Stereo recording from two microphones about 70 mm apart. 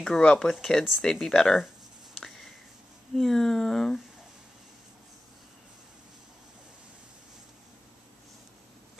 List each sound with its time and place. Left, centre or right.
0.0 s speech: centre
2.1 s a sound: centre
3.2 s speech: centre